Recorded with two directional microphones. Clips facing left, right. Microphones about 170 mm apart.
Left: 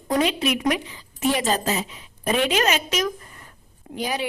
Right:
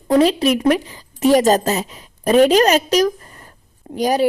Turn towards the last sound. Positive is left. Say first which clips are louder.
# right 10 dB
turn(degrees=-40)  # may be behind; listen again after turning